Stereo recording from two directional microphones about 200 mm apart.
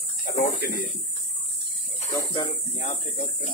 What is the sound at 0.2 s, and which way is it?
Speech, 50° left (ahead or behind).